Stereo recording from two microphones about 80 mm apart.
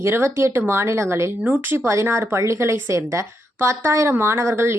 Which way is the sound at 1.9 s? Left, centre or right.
Right.